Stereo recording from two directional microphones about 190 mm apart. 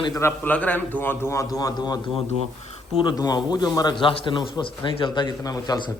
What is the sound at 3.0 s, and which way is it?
A man's voice, 20° left (ahead or behind).